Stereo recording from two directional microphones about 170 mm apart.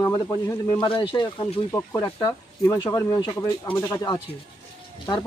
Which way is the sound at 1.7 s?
15° left (ahead or behind).